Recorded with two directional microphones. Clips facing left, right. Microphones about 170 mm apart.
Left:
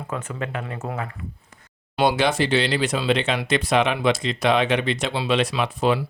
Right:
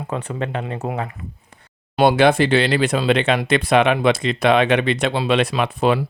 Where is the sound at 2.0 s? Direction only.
55° right (ahead or behind).